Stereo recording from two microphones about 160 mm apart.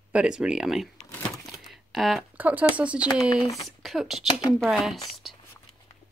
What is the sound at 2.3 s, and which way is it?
Speech, 10° right (ahead or behind).